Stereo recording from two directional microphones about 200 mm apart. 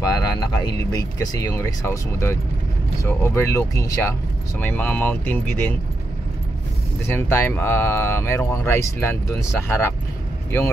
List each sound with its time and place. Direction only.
0.0 s a sound: 20° left (ahead or behind)
0.9 s speech: 20° left (ahead or behind)
7.1 s speech: 10° left (ahead or behind)